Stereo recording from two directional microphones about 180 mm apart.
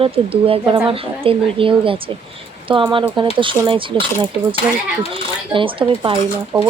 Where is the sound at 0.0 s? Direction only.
30° right (ahead or behind).